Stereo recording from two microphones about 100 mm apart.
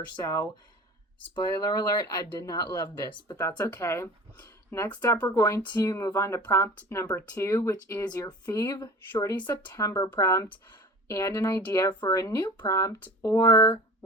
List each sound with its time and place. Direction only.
0.2 s speech: 35° left (ahead or behind)
2.9 s speech: 45° left (ahead or behind)
3.3 s speech: 30° left (ahead or behind)
9.3 s speech: 50° left (ahead or behind)
9.7 s speech: 35° left (ahead or behind)